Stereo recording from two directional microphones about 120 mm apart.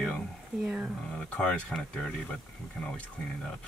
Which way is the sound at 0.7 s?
10° right (ahead or behind).